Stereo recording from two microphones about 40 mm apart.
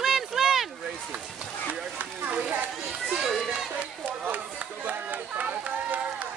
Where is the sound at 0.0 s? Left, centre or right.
Centre.